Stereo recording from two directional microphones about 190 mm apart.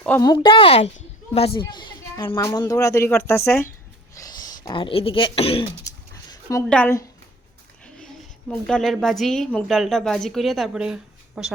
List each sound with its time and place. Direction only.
0.3 s a woman's voice: 30° left (ahead or behind)
5.9 s a sound: 15° left (ahead or behind)
6.7 s a woman's voice: 10° left (ahead or behind)